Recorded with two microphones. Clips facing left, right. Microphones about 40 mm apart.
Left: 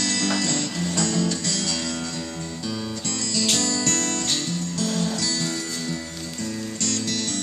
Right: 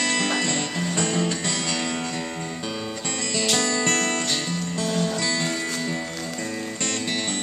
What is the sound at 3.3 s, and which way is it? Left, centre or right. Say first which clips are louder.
Music: right 1 dB; right.